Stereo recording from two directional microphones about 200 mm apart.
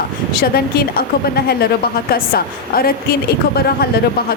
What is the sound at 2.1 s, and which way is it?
Speech, 45° left (ahead or behind).